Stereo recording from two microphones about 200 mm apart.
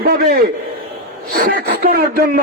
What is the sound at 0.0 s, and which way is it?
A man's voice, 50° right (ahead or behind).